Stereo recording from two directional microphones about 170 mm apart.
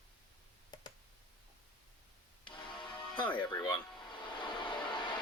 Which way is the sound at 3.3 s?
25° left (ahead or behind).